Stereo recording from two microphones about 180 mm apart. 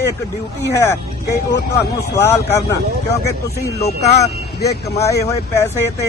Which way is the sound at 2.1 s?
15° left (ahead or behind).